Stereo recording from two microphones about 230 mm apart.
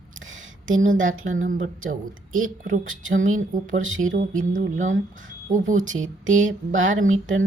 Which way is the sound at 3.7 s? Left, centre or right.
Right.